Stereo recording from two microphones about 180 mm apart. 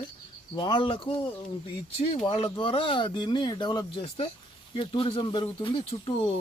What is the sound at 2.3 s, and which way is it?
Speech, 25° left (ahead or behind).